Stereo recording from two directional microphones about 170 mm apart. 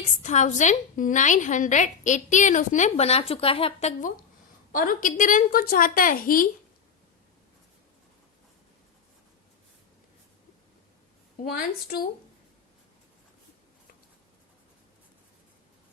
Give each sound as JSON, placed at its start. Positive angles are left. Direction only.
{"t": 0.2, "sound": "a woman's voice", "side_deg": 45}
{"t": 4.7, "sound": "a woman's voice", "side_deg": 55}
{"t": 11.4, "sound": "a woman's voice", "side_deg": 55}